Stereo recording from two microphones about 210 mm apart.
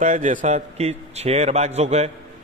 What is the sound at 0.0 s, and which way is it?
A man's voice, 35° right (ahead or behind).